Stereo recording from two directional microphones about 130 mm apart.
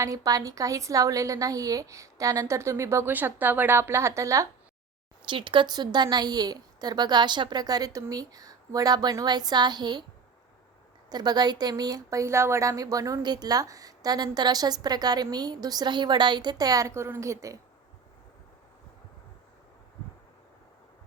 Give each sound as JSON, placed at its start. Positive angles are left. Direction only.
{"t": 0.0, "sound": "a woman's voice", "side_deg": -25}
{"t": 5.3, "sound": "a woman's voice", "side_deg": -40}
{"t": 11.1, "sound": "a woman's voice", "side_deg": -30}